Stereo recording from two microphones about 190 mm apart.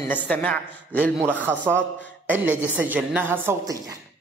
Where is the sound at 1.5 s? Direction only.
15° right (ahead or behind).